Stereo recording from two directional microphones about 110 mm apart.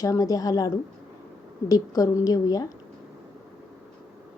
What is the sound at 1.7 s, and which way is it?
Speech, 30° left (ahead or behind).